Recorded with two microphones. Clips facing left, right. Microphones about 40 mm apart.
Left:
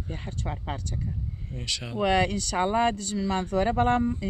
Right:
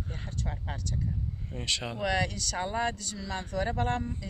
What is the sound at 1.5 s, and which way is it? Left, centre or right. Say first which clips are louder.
Speech: right 1 dB; centre.